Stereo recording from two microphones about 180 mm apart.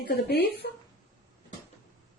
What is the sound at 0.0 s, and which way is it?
Speech, 65° left (ahead or behind).